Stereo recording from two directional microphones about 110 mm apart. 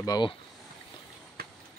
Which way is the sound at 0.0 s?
35° left (ahead or behind).